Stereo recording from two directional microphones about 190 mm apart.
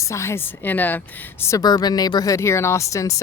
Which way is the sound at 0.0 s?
15° left (ahead or behind).